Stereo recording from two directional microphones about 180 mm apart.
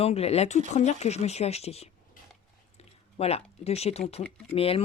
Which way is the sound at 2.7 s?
35° left (ahead or behind).